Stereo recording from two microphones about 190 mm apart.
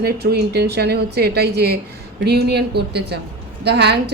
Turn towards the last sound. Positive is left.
turn(degrees=-60)  # may be behind; listen again after turning